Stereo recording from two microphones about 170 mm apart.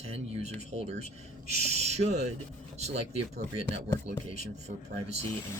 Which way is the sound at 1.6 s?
40° right (ahead or behind).